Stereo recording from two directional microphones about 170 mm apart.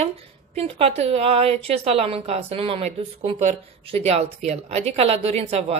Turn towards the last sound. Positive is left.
turn(degrees=-35)  # may be behind; listen again after turning